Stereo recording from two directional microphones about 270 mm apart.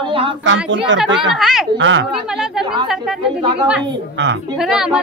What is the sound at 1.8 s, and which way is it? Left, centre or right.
Speech, right.